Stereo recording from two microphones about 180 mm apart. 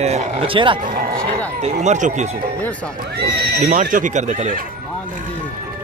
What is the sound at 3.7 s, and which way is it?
Speech, 45° right (ahead or behind).